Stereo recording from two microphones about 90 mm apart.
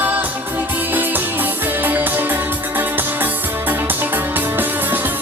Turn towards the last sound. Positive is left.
turn(degrees=-20)  # may be behind; listen again after turning